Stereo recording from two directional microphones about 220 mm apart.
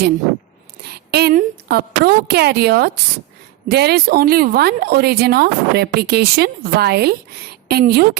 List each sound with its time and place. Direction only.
1.1 s a woman's voice: 40° right (ahead or behind)